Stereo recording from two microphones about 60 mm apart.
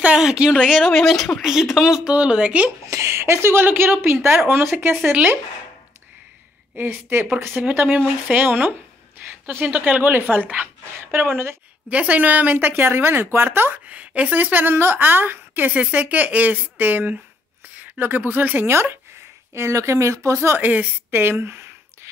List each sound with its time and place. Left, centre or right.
0.2 s speech: centre
0.7 s speech: centre
2.1 s a woman's voice: centre
2.9 s speech: right
6.8 s a woman's voice: right
11.9 s a woman's voice: right
12.5 s speech: right
13.8 s a woman's voice: right
19.5 s speech: right
20.5 s speech: right
21.1 s a sound: right